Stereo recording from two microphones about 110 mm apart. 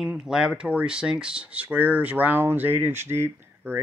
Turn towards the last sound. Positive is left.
turn(degrees=-20)  # may be behind; listen again after turning